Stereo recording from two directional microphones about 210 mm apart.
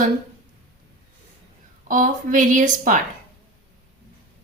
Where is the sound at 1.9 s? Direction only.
40° right (ahead or behind).